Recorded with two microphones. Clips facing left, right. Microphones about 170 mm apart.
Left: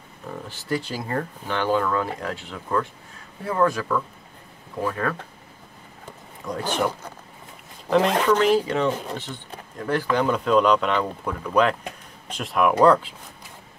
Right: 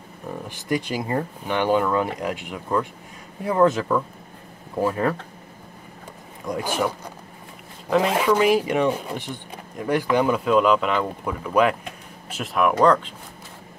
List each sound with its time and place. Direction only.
0.5 s speech: 15° right (ahead or behind)
6.4 s speech: 10° right (ahead or behind); by 13.1 s 5° left (ahead or behind)